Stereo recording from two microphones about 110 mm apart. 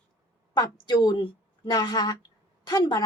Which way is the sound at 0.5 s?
40° left (ahead or behind).